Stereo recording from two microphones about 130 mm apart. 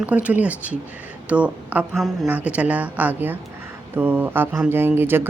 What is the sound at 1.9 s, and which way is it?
Speech, centre (ahead or behind).